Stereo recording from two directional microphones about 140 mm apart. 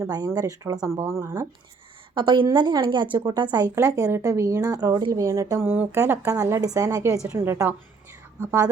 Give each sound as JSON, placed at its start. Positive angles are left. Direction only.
{"t": 0.0, "sound": "speech", "side_deg": -25}
{"t": 2.1, "sound": "a woman's voice", "side_deg": -35}